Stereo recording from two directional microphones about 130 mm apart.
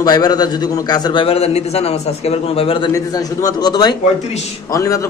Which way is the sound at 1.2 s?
50° left (ahead or behind).